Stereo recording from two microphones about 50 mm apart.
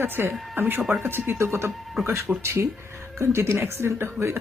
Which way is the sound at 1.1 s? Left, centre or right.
Right.